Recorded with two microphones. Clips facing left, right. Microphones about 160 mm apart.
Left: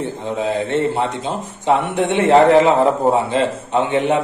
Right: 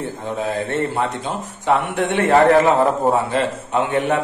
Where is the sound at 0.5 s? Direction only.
20° left (ahead or behind).